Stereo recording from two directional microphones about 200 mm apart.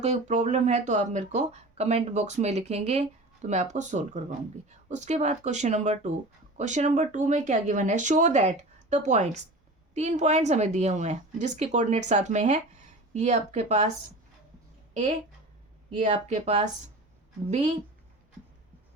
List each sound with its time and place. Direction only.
0.0 s speech: 35° right (ahead or behind)
16.0 s speech: 35° right (ahead or behind)